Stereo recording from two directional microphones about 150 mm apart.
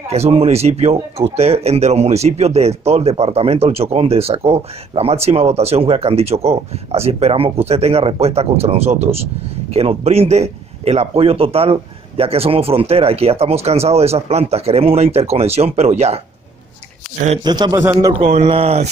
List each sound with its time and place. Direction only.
0.1 s speech: 45° right (ahead or behind)
17.4 s a man's voice: 30° right (ahead or behind)
18.2 s speech: 40° right (ahead or behind)